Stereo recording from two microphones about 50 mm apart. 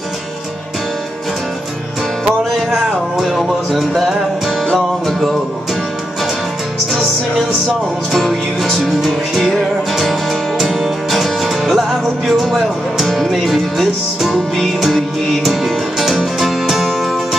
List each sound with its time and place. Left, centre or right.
2.5 s music: centre
6.9 s music: centre
11.1 s music: centre